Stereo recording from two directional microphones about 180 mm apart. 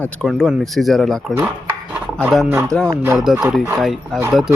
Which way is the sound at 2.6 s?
5° left (ahead or behind).